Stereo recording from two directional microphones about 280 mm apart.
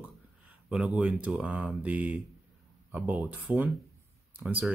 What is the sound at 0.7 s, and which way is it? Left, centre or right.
Speech, centre.